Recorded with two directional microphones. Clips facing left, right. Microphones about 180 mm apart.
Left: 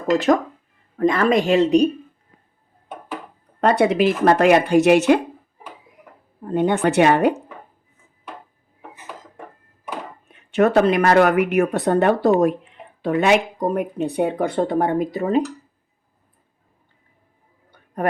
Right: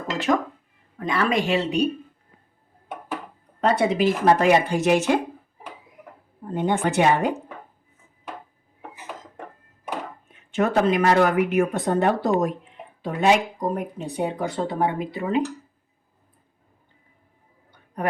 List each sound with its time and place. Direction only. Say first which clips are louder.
0.9 s speech: left 6 dB; 45° left (ahead or behind)
3.6 s speech: left 4 dB; 65° left (ahead or behind)
6.5 s speech: left 5 dB; 65° left (ahead or behind)
10.5 s speech: left 5 dB; 65° left (ahead or behind); by 15.4 s 40° left (ahead or behind)
17.7 s a sound: left 4 dB; 50° left (ahead or behind)